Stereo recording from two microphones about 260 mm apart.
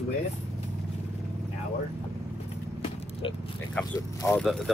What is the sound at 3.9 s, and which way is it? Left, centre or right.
Speech, centre.